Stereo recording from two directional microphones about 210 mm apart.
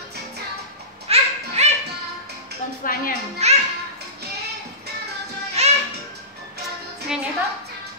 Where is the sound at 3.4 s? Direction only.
30° right (ahead or behind).